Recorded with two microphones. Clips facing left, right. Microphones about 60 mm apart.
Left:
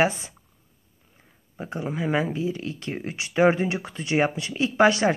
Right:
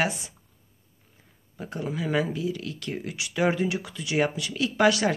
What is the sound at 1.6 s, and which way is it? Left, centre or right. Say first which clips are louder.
Speech: left 2 dB; left.